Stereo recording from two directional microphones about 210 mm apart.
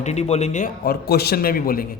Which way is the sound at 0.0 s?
30° left (ahead or behind).